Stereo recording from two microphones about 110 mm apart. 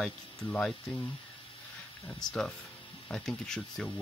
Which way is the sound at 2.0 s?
5° left (ahead or behind).